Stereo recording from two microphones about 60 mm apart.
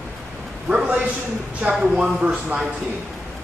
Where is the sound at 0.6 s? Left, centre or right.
Centre.